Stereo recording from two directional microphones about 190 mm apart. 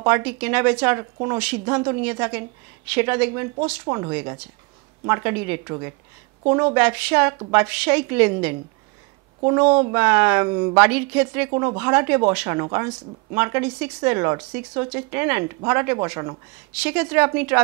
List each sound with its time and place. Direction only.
0.0 s speech: 10° right (ahead or behind)
9.9 s speech: 10° right (ahead or behind)
16.7 s speech: 5° right (ahead or behind)